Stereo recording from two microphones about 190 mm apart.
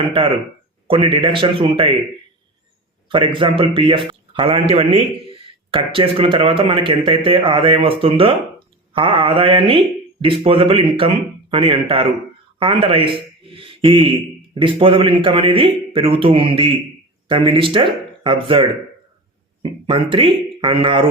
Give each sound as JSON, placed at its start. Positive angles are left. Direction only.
{"t": 0.9, "sound": "a man's voice", "side_deg": -25}
{"t": 3.1, "sound": "a man's voice", "side_deg": -25}